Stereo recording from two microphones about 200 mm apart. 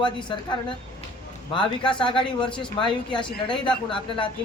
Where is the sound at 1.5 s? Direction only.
25° left (ahead or behind).